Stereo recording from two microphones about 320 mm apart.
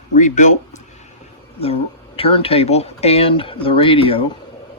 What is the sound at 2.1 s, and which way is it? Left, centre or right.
Speech, centre.